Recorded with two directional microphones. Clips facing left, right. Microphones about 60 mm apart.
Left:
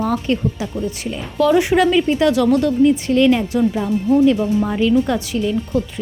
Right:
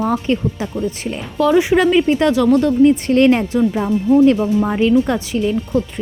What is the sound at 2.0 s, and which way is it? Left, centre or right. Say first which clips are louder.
Speech: right 1 dB; right.